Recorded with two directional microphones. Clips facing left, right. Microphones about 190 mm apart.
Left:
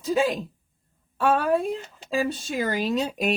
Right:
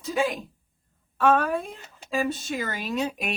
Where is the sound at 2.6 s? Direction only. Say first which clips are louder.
Left 7 dB; 35° left (ahead or behind).